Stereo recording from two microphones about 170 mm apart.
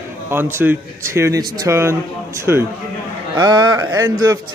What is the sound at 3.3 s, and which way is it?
Speech, 20° right (ahead or behind).